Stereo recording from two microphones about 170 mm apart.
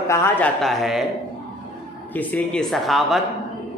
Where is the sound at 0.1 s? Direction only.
15° left (ahead or behind).